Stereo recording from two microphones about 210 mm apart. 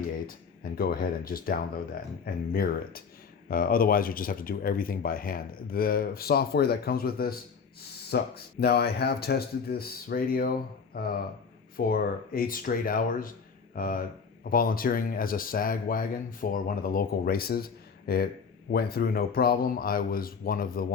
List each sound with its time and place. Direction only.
0.3 s speech: 45° left (ahead or behind)